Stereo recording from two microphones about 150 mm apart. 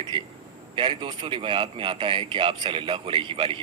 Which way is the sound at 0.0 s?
35° right (ahead or behind).